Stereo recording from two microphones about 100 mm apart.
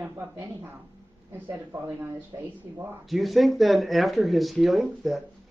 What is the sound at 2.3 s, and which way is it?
Speech, 35° right (ahead or behind).